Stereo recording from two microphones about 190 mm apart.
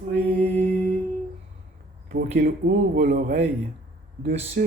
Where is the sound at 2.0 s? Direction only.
55° right (ahead or behind).